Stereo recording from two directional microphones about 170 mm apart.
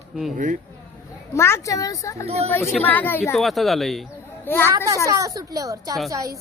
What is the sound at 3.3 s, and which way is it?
Speech, centre (ahead or behind).